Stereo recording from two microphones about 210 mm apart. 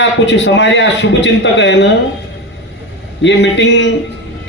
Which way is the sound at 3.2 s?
60° left (ahead or behind).